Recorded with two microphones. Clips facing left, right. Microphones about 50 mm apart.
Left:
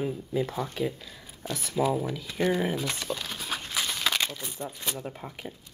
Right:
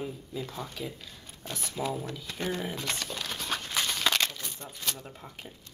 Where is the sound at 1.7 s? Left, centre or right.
Centre.